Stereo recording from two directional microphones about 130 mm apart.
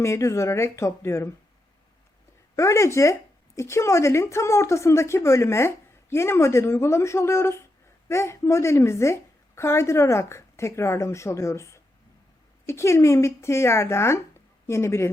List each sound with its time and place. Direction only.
0.0 s speech: 20° left (ahead or behind)
2.6 s speech: 25° left (ahead or behind)